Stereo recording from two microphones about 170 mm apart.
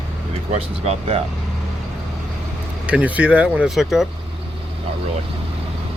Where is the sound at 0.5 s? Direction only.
40° right (ahead or behind).